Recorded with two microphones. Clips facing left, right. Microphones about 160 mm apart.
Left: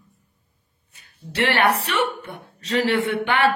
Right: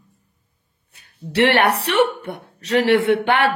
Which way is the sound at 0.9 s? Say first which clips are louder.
Right 9 dB; 70° right (ahead or behind).